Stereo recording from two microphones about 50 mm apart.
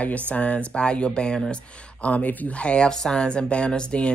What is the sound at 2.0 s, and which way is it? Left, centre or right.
Speech, left.